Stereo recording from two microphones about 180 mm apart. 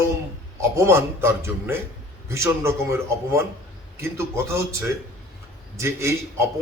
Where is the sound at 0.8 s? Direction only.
15° right (ahead or behind).